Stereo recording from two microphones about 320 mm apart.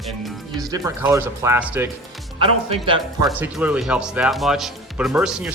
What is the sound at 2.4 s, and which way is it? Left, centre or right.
Speech, centre.